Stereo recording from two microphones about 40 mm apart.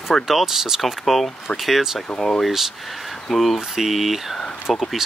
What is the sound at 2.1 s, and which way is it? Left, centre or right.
Speech, centre.